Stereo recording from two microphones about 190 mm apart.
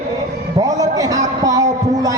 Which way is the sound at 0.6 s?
20° right (ahead or behind).